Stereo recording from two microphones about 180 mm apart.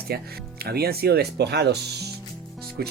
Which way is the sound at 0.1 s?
60° right (ahead or behind).